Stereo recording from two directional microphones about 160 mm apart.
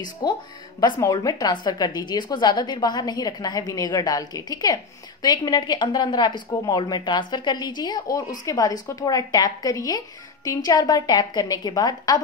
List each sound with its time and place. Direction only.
0.0 s speech: 25° left (ahead or behind)